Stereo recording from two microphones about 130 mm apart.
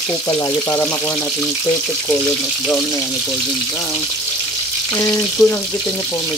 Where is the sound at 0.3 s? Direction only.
20° left (ahead or behind).